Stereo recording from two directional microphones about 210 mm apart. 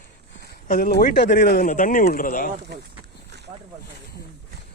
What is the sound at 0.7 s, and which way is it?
Speech, 45° left (ahead or behind).